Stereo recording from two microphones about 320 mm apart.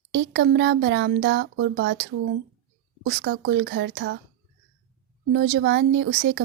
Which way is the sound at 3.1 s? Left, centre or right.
Right.